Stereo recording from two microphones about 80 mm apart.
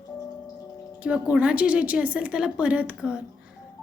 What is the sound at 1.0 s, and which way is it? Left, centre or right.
A woman's voice, centre.